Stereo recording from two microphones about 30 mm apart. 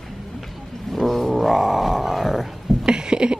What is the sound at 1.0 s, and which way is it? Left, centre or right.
Roaring cats, centre.